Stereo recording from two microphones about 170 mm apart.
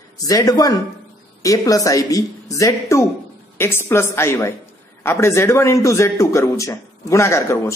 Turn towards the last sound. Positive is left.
turn(degrees=15)  # may be behind; listen again after turning